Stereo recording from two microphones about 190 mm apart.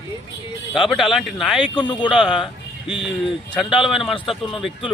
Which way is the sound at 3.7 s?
Centre (ahead or behind).